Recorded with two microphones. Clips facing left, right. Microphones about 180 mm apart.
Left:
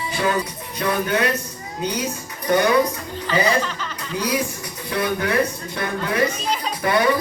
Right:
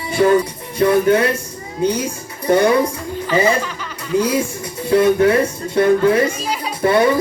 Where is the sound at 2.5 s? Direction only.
30° right (ahead or behind).